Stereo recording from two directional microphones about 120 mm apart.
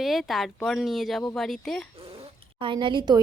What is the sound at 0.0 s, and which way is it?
Speech, centre (ahead or behind).